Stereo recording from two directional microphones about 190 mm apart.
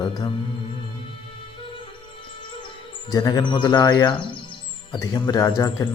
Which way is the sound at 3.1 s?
20° left (ahead or behind).